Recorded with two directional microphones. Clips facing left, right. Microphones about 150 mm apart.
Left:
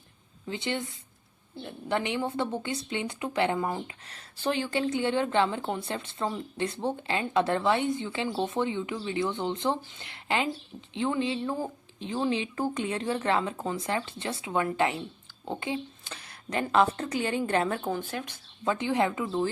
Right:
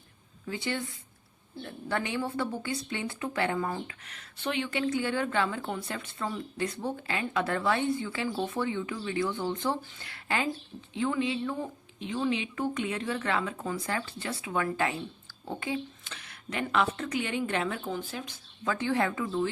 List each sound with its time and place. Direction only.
0.4 s speech: 20° left (ahead or behind)
16.2 s speech: 35° left (ahead or behind)
17.8 s speech: 60° left (ahead or behind)
18.6 s speech: 20° left (ahead or behind)